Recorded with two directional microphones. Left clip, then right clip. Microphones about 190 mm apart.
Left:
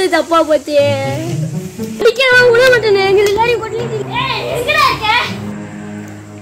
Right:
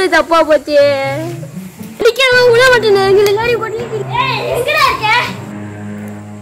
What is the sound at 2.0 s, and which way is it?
Speech, 15° right (ahead or behind).